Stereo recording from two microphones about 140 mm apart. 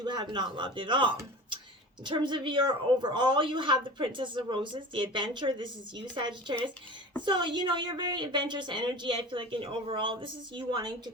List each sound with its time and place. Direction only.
0.0 s a woman's voice: 30° right (ahead or behind)